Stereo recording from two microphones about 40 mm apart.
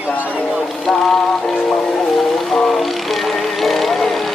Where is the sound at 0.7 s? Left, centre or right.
Centre.